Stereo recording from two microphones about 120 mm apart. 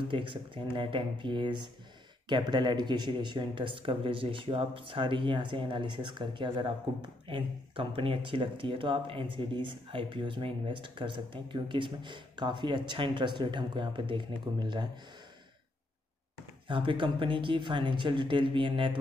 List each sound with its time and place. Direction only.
0.1 s speech: 45° right (ahead or behind)
16.6 s speech: 45° right (ahead or behind)